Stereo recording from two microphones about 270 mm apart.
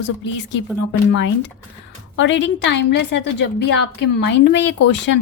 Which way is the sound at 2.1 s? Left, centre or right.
Left.